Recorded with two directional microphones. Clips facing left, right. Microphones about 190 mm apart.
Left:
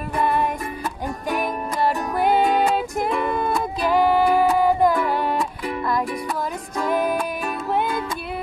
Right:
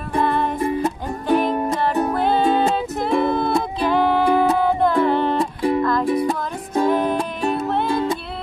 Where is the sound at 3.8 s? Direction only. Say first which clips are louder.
Left 1 dB; 10° left (ahead or behind).